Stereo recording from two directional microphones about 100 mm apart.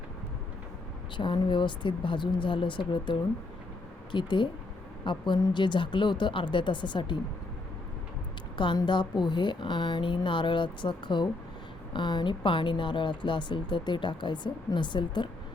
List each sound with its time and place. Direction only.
1.1 s a woman's voice: 55° left (ahead or behind)
8.5 s a woman's voice: 50° left (ahead or behind)